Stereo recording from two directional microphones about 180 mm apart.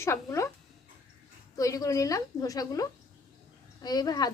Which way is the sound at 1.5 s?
20° left (ahead or behind).